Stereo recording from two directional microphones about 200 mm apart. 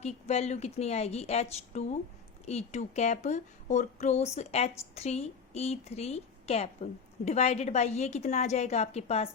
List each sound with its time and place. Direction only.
0.0 s a woman's voice: 35° left (ahead or behind)